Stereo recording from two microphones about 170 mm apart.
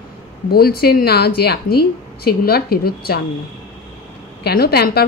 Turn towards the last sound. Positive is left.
turn(degrees=70)  # may be behind; listen again after turning